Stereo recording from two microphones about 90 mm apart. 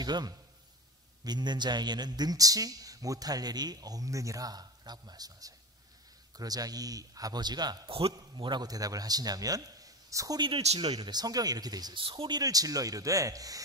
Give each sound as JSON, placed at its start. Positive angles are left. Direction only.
{"t": 0.0, "sound": "a man's voice", "side_deg": -50}
{"t": 7.9, "sound": "a man's voice", "side_deg": -75}
{"t": 10.4, "sound": "speech", "side_deg": -70}
{"t": 11.9, "sound": "speech", "side_deg": -75}
{"t": 12.2, "sound": "speech", "side_deg": -50}